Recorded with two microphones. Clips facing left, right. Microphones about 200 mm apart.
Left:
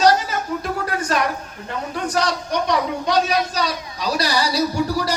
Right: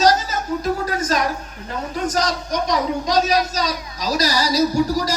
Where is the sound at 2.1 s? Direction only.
40° right (ahead or behind).